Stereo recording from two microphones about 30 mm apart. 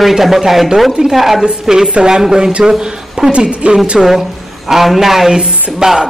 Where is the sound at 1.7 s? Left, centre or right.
Centre.